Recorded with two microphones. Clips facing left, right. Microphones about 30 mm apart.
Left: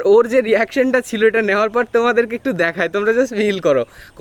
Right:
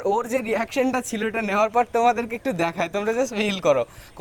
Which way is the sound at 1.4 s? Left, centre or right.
Left.